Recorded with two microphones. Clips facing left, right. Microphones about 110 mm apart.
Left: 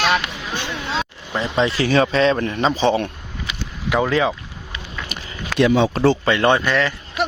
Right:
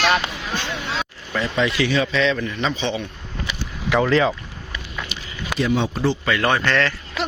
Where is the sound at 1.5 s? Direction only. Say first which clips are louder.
Left 4 dB; 35° left (ahead or behind).